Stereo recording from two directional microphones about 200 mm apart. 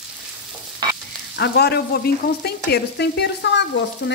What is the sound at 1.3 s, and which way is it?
Stir, 55° left (ahead or behind).